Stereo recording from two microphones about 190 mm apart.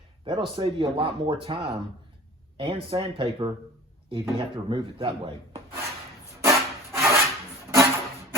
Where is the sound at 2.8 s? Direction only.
30° right (ahead or behind).